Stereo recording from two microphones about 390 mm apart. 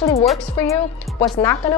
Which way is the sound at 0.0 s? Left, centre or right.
Centre.